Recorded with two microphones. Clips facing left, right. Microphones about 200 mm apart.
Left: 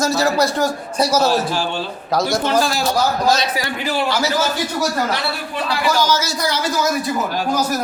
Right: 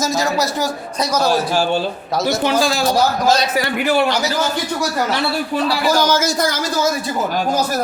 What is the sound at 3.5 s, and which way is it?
Speech, 60° right (ahead or behind).